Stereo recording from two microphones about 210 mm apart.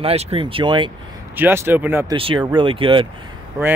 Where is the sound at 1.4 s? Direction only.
10° right (ahead or behind).